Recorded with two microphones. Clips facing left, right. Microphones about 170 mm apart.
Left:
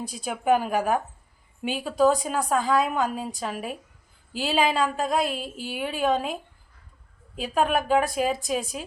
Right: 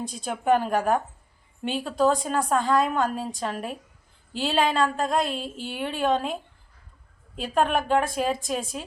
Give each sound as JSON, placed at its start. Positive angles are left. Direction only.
{"t": 0.1, "sound": "a woman's voice", "side_deg": 5}
{"t": 7.3, "sound": "a woman's voice", "side_deg": 5}